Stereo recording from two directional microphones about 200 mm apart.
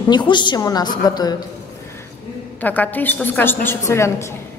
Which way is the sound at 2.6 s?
10° left (ahead or behind).